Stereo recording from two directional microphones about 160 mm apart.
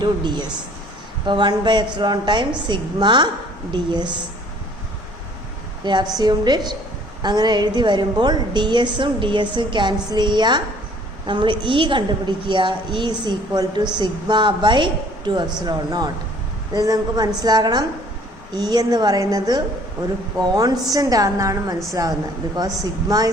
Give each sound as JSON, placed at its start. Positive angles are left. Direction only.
{"t": 0.0, "sound": "a woman's voice", "side_deg": -30}
{"t": 5.8, "sound": "a woman's voice", "side_deg": -30}